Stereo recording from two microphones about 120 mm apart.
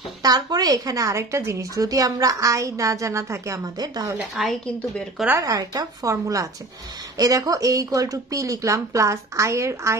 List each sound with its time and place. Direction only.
0.2 s a woman's voice: 35° right (ahead or behind)
4.4 s a woman's voice: centre (ahead or behind)
5.4 s a woman's voice: 30° right (ahead or behind)